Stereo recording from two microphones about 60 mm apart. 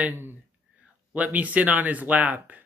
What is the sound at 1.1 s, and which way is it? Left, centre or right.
Speech, right.